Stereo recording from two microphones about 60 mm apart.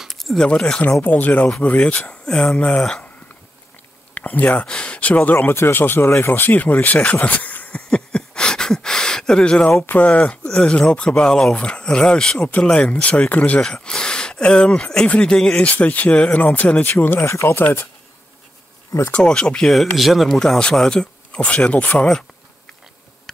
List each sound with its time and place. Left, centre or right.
0.1 s a sound: centre
0.5 s speech: centre
1.0 s speech: left
4.1 s speech: left
5.5 s speech: left
7.9 s a sound: centre
9.9 s speech: left
12.4 s speech: left
13.6 s speech: centre
17.2 s speech: left
17.6 s speech: left
19.1 s speech: centre
19.7 s speech: centre
20.3 s speech: centre